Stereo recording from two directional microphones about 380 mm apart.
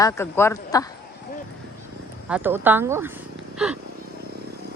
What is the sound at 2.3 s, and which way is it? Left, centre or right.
Speech, centre.